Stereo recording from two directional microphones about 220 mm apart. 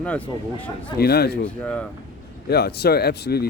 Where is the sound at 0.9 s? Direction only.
45° left (ahead or behind).